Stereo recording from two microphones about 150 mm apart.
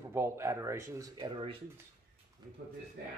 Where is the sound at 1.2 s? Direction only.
35° right (ahead or behind).